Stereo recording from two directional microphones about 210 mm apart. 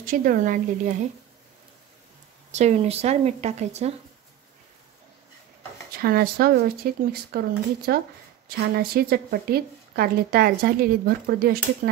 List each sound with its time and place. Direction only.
0.0 s a woman's voice: 40° right (ahead or behind)
2.5 s a woman's voice: 30° right (ahead or behind)
5.9 s a woman's voice: 45° right (ahead or behind)